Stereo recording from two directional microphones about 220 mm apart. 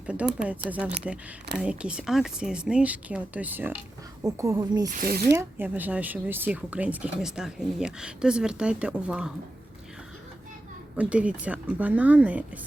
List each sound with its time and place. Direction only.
0.0 s speech: 5° right (ahead or behind)
4.9 s speech: 40° right (ahead or behind)
5.3 s speech: 10° right (ahead or behind)
10.9 s speech: 5° right (ahead or behind)